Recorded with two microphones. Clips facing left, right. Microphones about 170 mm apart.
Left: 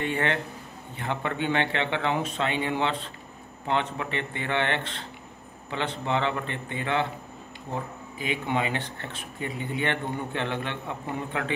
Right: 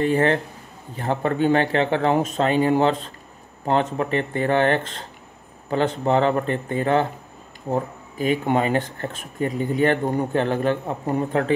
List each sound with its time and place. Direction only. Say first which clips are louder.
0.0 s speech: right 8 dB; 35° right (ahead or behind)